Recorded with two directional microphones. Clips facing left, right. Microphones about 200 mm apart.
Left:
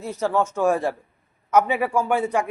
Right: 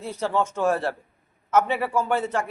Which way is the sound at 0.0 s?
10° left (ahead or behind).